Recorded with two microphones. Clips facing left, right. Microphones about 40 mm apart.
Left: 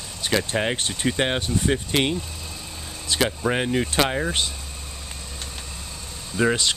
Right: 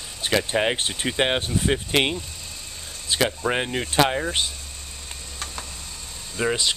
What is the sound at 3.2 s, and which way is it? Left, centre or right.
Speech, centre.